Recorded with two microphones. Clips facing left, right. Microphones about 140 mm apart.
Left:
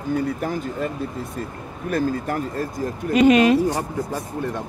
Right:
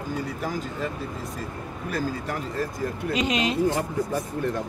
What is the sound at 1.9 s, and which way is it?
Speech, 45° left (ahead or behind).